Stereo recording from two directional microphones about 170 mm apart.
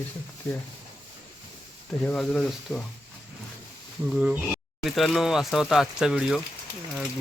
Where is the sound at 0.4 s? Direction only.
15° left (ahead or behind).